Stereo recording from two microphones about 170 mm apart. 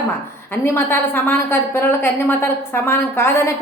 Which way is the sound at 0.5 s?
15° left (ahead or behind).